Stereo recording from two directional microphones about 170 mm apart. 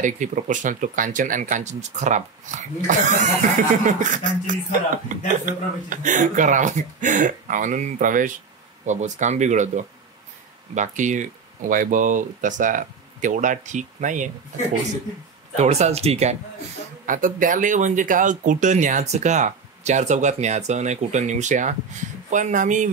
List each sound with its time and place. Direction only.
0.0 s speech: 50° right (ahead or behind)
15.5 s speech: 40° right (ahead or behind)
17.0 s speech: 50° right (ahead or behind)